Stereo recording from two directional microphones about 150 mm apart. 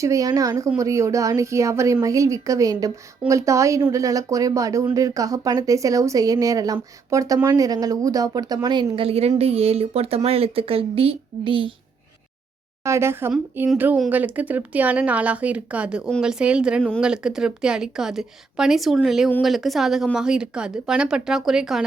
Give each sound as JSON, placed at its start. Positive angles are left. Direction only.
{"t": 0.0, "sound": "speech", "side_deg": -20}
{"t": 12.8, "sound": "a woman's voice", "side_deg": -15}